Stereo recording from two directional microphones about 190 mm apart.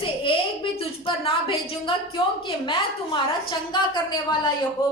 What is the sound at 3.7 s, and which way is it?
Speech, 25° left (ahead or behind).